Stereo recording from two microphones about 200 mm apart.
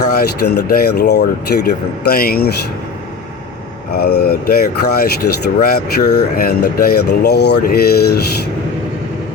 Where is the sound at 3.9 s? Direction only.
55° left (ahead or behind).